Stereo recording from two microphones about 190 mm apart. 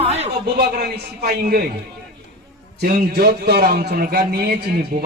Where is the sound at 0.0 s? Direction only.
35° right (ahead or behind).